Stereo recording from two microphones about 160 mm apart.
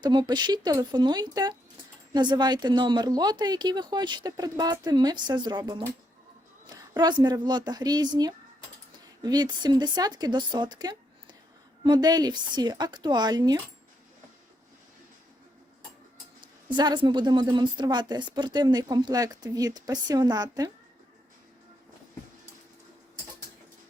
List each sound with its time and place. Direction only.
0.0 s a woman's voice: 25° right (ahead or behind)
16.7 s a woman's voice: 25° right (ahead or behind)